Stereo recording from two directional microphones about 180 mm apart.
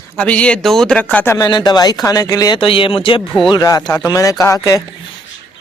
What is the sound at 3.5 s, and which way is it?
Speech, 20° left (ahead or behind).